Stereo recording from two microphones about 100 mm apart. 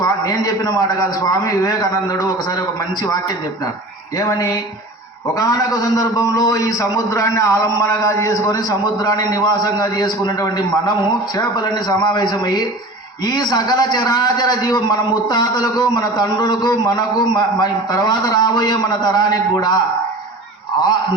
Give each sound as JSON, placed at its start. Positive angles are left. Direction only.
{"t": 0.0, "sound": "a man's voice", "side_deg": 40}
{"t": 4.2, "sound": "a man's voice", "side_deg": 35}